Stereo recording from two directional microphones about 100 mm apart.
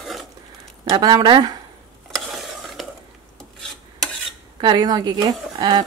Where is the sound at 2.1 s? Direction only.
Centre (ahead or behind).